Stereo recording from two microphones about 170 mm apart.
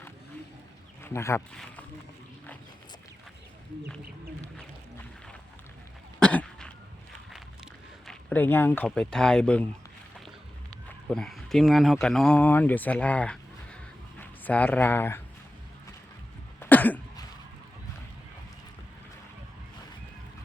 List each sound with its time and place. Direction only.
1.0 s speech: 15° left (ahead or behind)
1.5 s speech: 5° left (ahead or behind)
6.1 s cough: 5° left (ahead or behind)
8.0 s speech: 10° left (ahead or behind)
10.7 s speech: 5° left (ahead or behind)
16.6 s cough: 10° left (ahead or behind)